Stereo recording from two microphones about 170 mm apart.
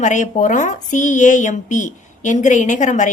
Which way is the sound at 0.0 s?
45° left (ahead or behind).